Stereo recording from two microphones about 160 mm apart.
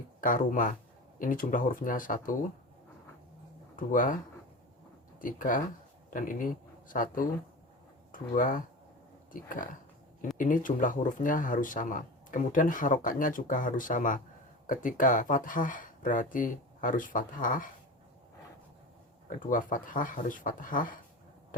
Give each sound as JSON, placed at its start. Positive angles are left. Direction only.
{"t": 0.2, "sound": "speech", "side_deg": 55}
{"t": 3.8, "sound": "speech", "side_deg": 55}
{"t": 5.2, "sound": "speech", "side_deg": 55}
{"t": 19.4, "sound": "speech", "side_deg": 55}